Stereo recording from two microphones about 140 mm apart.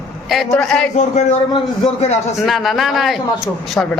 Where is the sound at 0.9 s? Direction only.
55° left (ahead or behind).